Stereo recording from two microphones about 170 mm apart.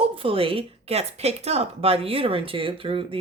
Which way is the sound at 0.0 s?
35° right (ahead or behind).